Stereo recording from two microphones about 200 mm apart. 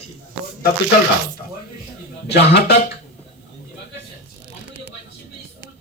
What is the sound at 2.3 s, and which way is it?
Speech, 55° left (ahead or behind).